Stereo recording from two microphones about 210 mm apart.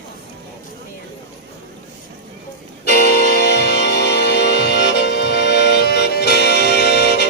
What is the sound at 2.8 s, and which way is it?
Music, 45° left (ahead or behind).